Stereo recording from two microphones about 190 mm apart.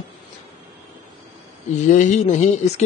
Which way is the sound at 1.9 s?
40° left (ahead or behind).